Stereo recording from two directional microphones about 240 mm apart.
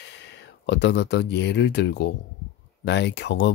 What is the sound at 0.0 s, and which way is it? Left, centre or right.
Speech, left.